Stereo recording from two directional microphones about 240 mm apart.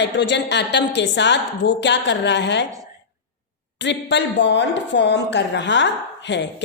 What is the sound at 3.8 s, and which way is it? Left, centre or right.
A woman's voice, left.